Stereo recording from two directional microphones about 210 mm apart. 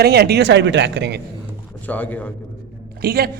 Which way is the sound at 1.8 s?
5° left (ahead or behind).